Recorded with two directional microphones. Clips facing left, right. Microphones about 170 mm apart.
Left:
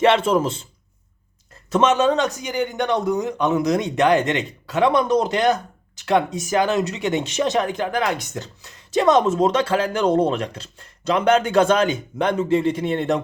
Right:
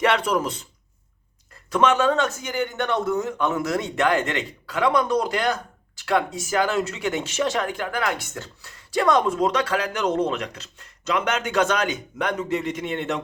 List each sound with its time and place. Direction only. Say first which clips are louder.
0.0 s speech: left 5 dB; 25° left (ahead or behind)
1.7 s speech: left 2 dB; 20° left (ahead or behind)